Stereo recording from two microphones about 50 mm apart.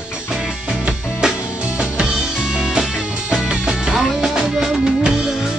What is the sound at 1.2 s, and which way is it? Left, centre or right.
Music, centre.